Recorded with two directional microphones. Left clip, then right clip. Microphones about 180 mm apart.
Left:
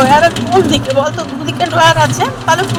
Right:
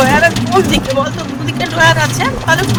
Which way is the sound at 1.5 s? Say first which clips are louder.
Left 2 dB; 10° right (ahead or behind).